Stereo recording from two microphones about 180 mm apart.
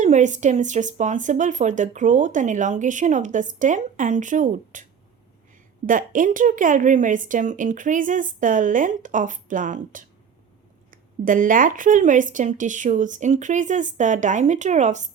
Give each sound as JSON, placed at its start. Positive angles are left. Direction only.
{"t": 0.0, "sound": "speech", "side_deg": -40}